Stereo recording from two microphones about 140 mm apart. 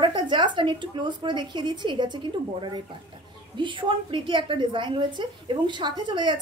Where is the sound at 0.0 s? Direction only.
35° right (ahead or behind).